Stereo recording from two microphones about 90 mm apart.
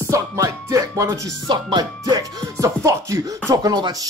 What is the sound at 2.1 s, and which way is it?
Music, 40° right (ahead or behind).